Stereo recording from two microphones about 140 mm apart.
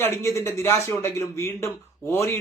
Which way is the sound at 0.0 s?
20° left (ahead or behind).